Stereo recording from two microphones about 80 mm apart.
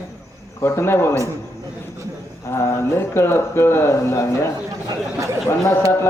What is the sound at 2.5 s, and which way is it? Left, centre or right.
A man's voice, left.